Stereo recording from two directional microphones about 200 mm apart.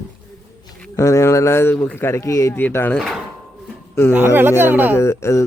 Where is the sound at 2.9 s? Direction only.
Centre (ahead or behind).